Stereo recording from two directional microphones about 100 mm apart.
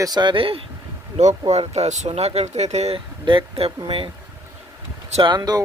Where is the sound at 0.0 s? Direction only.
45° right (ahead or behind); by 0.6 s 60° right (ahead or behind).